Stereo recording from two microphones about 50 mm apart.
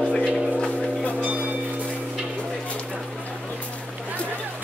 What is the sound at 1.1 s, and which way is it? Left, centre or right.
Music, right.